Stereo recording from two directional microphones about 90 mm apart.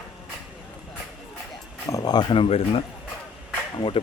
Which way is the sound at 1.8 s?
45° left (ahead or behind).